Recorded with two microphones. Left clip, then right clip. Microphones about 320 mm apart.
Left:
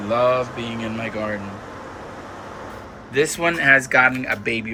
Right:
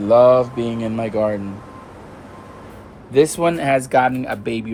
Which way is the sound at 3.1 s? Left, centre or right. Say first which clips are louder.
Right 4 dB; centre.